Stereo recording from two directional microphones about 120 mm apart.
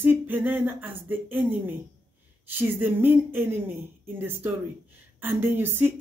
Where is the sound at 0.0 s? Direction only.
15° right (ahead or behind).